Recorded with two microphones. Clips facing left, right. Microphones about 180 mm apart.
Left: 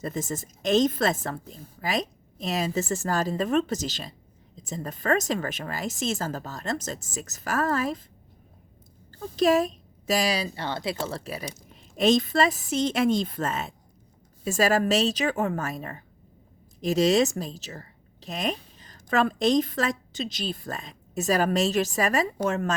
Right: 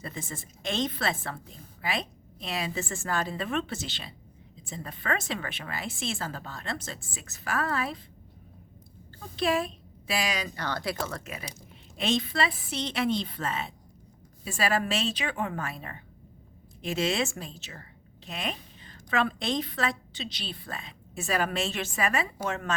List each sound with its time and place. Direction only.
0.0 s a woman's voice: 45° left (ahead or behind)
9.3 s a woman's voice: 40° left (ahead or behind)